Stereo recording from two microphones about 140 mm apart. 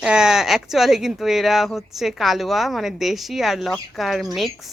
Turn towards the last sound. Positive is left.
turn(degrees=0)  # may be behind; listen again after turning